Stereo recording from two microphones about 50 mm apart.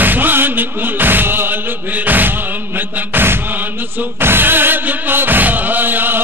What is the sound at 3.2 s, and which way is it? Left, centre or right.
Chant, right.